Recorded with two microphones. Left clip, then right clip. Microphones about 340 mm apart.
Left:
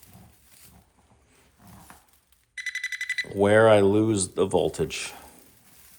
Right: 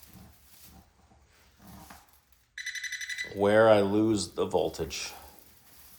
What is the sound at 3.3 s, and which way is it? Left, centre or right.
Speech, left.